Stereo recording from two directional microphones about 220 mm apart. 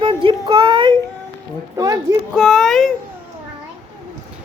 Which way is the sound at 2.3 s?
Centre (ahead or behind).